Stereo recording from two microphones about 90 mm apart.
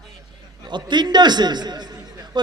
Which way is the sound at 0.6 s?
55° right (ahead or behind).